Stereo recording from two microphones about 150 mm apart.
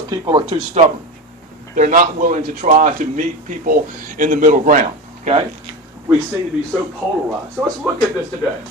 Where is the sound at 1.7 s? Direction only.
60° right (ahead or behind).